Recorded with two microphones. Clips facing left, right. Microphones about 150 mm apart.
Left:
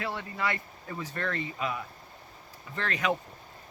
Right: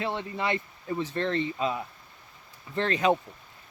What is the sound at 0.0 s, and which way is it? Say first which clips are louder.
Speech: right 3 dB; 25° right (ahead or behind).